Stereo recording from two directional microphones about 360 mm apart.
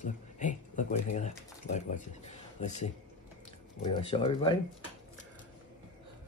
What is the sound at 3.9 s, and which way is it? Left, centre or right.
Speech, centre.